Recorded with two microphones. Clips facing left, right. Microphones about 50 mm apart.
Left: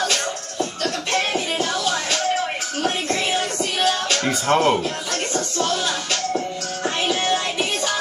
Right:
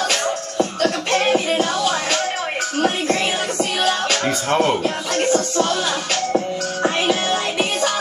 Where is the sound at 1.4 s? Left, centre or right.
Right.